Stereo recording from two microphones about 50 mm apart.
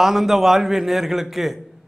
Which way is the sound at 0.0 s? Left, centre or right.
Centre.